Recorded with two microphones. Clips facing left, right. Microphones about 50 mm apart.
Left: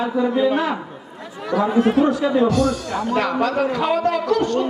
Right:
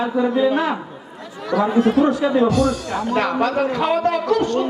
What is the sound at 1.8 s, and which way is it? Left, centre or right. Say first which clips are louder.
Speech: even; left.